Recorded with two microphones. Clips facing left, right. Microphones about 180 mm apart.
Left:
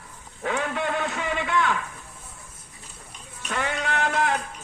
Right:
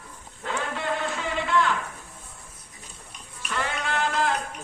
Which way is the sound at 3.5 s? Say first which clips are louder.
Left 2 dB; 60° left (ahead or behind).